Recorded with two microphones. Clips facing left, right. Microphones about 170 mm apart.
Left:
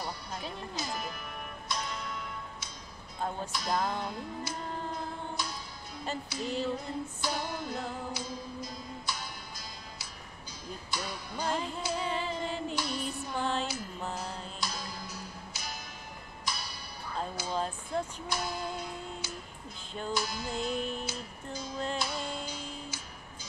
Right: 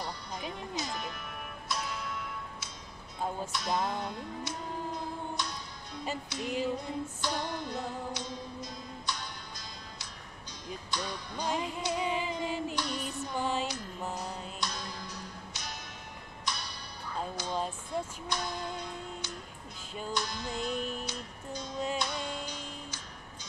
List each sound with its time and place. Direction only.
0.4 s music: 15° right (ahead or behind)
0.7 s music: centre (ahead or behind)
6.2 s speech: centre (ahead or behind)
6.5 s female singing: 10° right (ahead or behind)
7.2 s music: 5° left (ahead or behind)
10.7 s speech: 5° left (ahead or behind)
11.9 s music: 15° right (ahead or behind)
12.7 s female singing: 5° left (ahead or behind)
13.3 s female singing: 10° right (ahead or behind)
14.0 s music: centre (ahead or behind)
17.6 s female singing: 10° right (ahead or behind)
18.3 s music: 5° left (ahead or behind)
19.9 s music: 5° right (ahead or behind)
20.2 s music: 5° left (ahead or behind)